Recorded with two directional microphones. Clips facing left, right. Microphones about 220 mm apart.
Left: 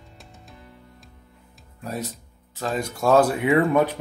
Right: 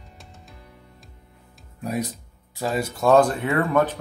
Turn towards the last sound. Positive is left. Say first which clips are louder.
# left 2 dB
turn(degrees=15)  # may be behind; listen again after turning